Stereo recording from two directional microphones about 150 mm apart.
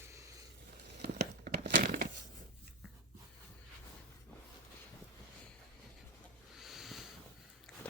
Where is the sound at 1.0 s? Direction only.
90° right; by 2.1 s 75° right (ahead or behind).